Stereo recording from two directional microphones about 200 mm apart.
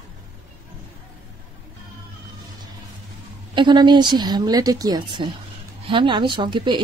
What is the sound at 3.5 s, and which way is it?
Speech, 25° right (ahead or behind).